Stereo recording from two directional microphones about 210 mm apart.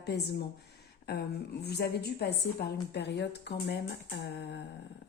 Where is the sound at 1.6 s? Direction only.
50° left (ahead or behind).